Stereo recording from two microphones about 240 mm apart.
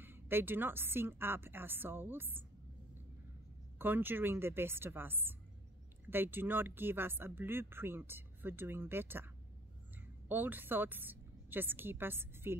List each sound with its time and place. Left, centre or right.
0.0 s speech: centre
3.7 s a woman's voice: centre